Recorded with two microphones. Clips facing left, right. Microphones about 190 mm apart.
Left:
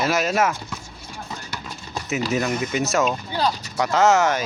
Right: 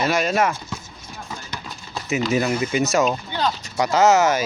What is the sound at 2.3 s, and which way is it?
A man's voice, 5° right (ahead or behind).